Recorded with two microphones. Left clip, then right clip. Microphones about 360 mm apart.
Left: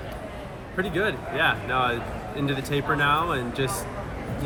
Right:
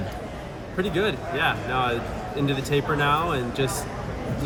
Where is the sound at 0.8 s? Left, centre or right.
Centre.